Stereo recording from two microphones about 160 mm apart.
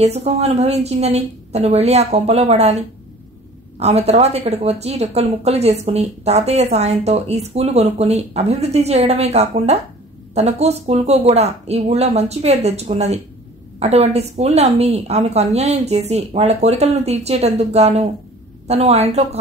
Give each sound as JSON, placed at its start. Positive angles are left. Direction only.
{"t": 0.0, "sound": "a woman's voice", "side_deg": -40}
{"t": 3.8, "sound": "a woman's voice", "side_deg": -40}